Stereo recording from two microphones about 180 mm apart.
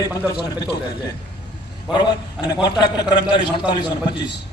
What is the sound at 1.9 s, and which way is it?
A man's voice, 25° left (ahead or behind).